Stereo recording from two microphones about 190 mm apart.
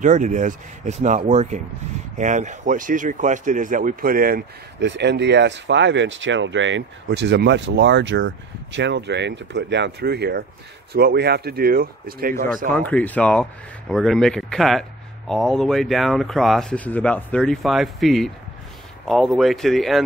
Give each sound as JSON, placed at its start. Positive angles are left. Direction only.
{"t": 0.0, "sound": "speech", "side_deg": -40}
{"t": 12.7, "sound": "speech", "side_deg": 10}